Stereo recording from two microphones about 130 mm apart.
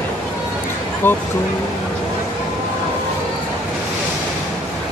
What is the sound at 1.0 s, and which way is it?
Speech, 15° left (ahead or behind).